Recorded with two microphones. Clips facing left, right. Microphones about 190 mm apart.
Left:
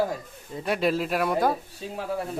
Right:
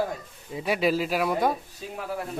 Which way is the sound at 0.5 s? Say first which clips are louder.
Even; centre (ahead or behind).